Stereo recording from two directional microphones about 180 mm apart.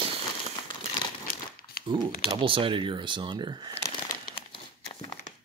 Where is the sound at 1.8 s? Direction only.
55° left (ahead or behind).